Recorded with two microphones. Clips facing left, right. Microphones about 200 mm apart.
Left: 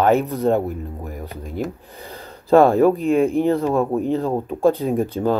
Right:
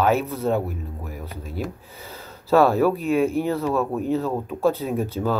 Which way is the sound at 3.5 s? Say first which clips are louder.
Left 4 dB; 15° left (ahead or behind).